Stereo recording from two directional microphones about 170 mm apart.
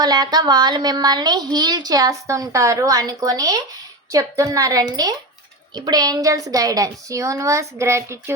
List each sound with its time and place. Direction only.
0.0 s a woman's voice: 25° right (ahead or behind)